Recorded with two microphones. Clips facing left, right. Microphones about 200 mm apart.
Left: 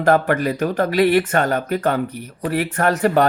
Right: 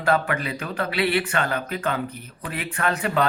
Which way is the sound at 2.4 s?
40° left (ahead or behind).